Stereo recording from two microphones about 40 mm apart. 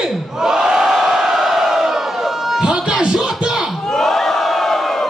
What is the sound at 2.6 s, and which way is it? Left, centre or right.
Music, centre.